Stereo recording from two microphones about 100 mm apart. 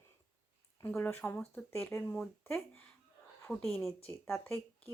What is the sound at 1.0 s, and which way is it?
Speech, 20° left (ahead or behind).